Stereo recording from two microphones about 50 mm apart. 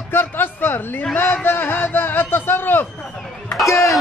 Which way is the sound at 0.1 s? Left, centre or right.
Left.